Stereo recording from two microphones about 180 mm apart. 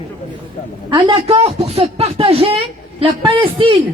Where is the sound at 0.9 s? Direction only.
30° right (ahead or behind).